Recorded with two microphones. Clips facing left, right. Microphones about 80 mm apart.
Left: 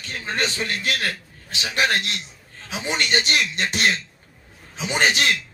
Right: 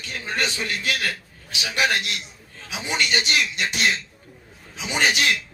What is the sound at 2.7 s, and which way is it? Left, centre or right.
A man's voice, left.